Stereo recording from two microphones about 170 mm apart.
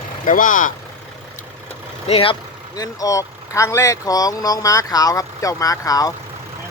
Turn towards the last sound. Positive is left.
turn(degrees=20)  # may be behind; listen again after turning